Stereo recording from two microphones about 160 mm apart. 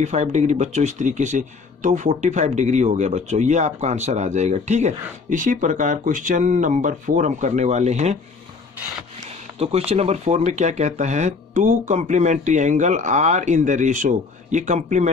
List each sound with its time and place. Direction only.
0.0 s speech: 45° right (ahead or behind)
9.6 s speech: 40° right (ahead or behind)